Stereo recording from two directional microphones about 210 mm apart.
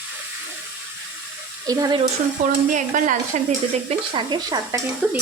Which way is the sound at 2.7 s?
35° right (ahead or behind).